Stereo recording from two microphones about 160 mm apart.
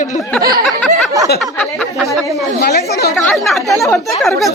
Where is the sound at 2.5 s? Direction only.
80° left.